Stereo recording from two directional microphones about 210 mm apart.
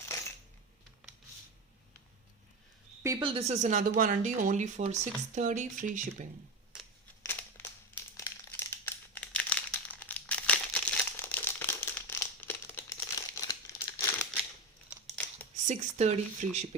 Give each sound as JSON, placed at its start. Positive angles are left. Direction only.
{"t": 3.0, "sound": "a woman's voice", "side_deg": -20}
{"t": 7.3, "sound": "crumpling", "side_deg": 10}
{"t": 15.6, "sound": "a woman's voice", "side_deg": -35}